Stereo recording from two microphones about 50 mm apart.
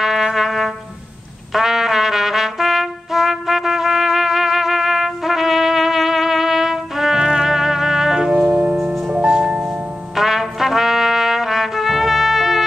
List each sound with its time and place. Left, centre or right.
0.0 s trumpet: centre
8.3 s music: right
10.1 s trumpet: centre